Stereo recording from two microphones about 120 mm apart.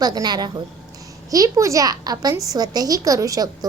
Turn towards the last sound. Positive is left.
turn(degrees=-30)  # may be behind; listen again after turning